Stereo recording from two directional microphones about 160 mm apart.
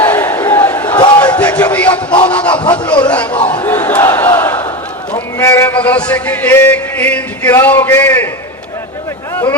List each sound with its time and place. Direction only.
0.0 s crowd: 10° left (ahead or behind)
0.9 s crowd: 25° left (ahead or behind)
1.2 s a sound: 10° left (ahead or behind)
3.0 s battle cry: 10° left (ahead or behind)
5.1 s a man's voice: 15° left (ahead or behind)
9.3 s a sound: 15° left (ahead or behind)